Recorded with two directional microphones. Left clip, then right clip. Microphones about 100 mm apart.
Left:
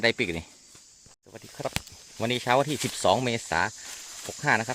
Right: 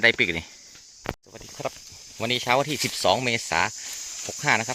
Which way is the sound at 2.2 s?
30° left (ahead or behind).